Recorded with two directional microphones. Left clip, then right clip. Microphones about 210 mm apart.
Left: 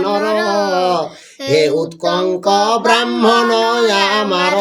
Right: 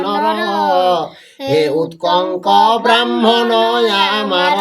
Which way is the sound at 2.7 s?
20° left (ahead or behind).